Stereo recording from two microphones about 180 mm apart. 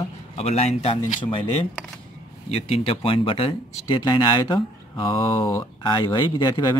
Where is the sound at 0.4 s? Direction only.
35° left (ahead or behind).